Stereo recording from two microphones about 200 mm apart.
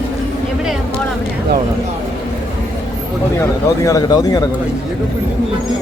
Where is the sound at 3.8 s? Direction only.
15° left (ahead or behind).